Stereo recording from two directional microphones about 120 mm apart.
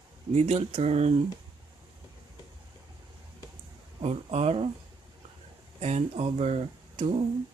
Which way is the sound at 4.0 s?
60° right (ahead or behind).